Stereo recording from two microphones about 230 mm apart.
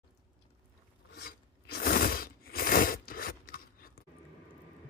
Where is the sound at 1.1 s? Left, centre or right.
Left.